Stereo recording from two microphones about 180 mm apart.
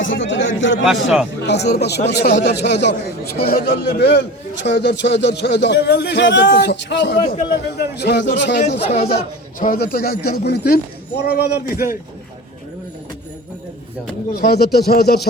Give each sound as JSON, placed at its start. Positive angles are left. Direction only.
{"t": 0.0, "sound": "a man's voice", "side_deg": 90}
{"t": 0.9, "sound": "speech", "side_deg": -5}
{"t": 1.4, "sound": "a man's voice", "side_deg": 70}
{"t": 3.3, "sound": "a man's voice", "side_deg": 60}
{"t": 9.0, "sound": "speech", "side_deg": 55}
{"t": 14.3, "sound": "speech", "side_deg": 60}